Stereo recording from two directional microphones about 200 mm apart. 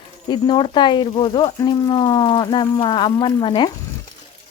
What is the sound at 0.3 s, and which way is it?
Speech, 20° left (ahead or behind).